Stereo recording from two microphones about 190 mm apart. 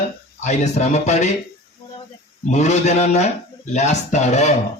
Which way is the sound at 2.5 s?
35° left (ahead or behind).